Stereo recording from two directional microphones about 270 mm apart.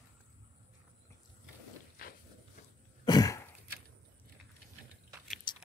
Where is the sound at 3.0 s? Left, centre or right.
Centre.